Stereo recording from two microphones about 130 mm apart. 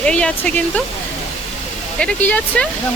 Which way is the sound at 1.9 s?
10° left (ahead or behind).